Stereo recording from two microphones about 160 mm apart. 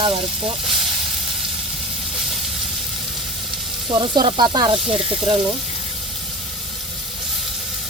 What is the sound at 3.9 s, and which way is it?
Sizzle, 30° right (ahead or behind).